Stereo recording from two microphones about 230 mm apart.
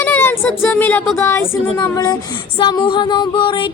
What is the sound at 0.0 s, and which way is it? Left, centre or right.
A woman's voice, centre.